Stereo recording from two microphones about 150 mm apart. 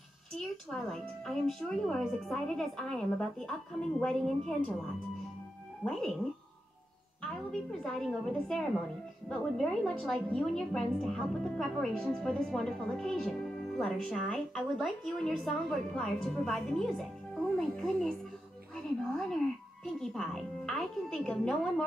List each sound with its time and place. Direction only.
0.7 s a woman's voice: centre (ahead or behind)
5.8 s speech: 10° left (ahead or behind)
7.8 s a woman's voice: 5° left (ahead or behind)
19.1 s music: 5° left (ahead or behind)